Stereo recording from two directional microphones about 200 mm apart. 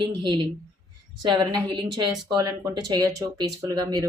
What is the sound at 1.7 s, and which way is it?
Speech, 20° right (ahead or behind).